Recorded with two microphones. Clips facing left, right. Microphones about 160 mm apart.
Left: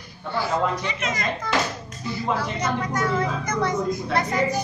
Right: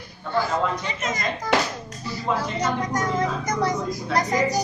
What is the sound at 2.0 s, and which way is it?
A woman's voice, 40° right (ahead or behind).